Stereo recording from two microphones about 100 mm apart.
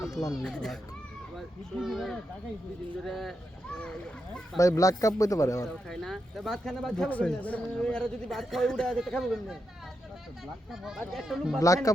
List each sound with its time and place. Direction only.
0.0 s children playing: 35° left (ahead or behind)
0.4 s speech: 5° left (ahead or behind)
4.5 s a man's voice: 35° left (ahead or behind)
5.6 s speech: 5° left (ahead or behind)
10.7 s speech: 5° right (ahead or behind)
11.6 s a man's voice: 35° left (ahead or behind)